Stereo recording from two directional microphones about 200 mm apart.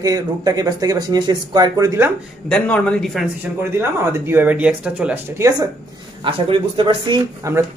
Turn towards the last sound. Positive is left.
turn(degrees=-15)  # may be behind; listen again after turning